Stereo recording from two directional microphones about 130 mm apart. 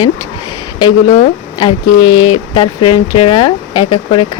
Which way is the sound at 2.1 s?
35° left (ahead or behind).